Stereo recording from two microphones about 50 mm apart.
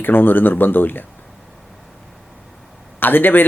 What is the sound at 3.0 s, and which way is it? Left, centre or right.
Speech, left.